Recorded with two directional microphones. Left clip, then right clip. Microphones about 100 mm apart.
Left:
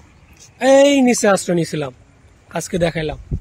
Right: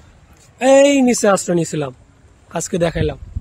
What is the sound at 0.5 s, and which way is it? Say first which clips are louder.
A man's voice: even; 90° right.